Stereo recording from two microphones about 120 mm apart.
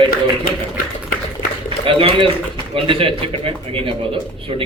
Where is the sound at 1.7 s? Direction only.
45° right (ahead or behind).